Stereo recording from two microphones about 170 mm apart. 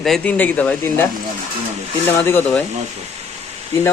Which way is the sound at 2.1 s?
10° left (ahead or behind).